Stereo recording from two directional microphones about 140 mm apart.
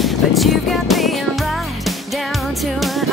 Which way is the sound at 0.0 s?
Centre (ahead or behind).